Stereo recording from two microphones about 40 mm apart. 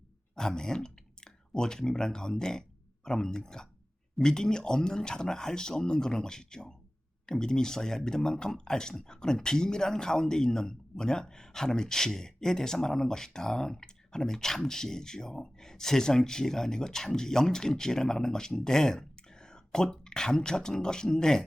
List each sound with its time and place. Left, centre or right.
0.3 s speech: centre